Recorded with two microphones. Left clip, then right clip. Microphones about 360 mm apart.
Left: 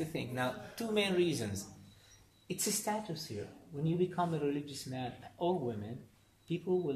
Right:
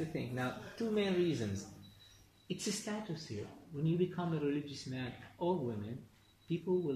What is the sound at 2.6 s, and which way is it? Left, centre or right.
A man's voice, centre.